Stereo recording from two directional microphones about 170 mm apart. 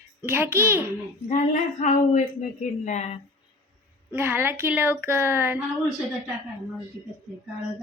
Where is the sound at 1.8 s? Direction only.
45° left (ahead or behind).